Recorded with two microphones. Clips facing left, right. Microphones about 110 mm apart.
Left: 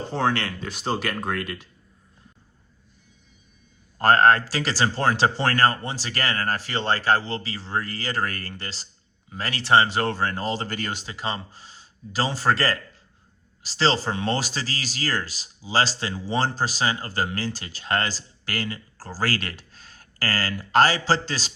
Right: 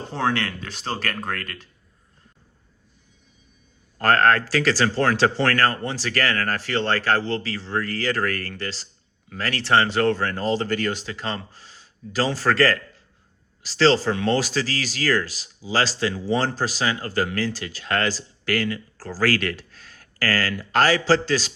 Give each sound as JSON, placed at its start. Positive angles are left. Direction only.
{"t": 0.1, "sound": "speech", "side_deg": 0}
{"t": 3.9, "sound": "speech", "side_deg": 25}